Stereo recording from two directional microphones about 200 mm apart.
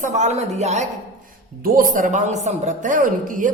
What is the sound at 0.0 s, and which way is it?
A woman's voice, 35° right (ahead or behind).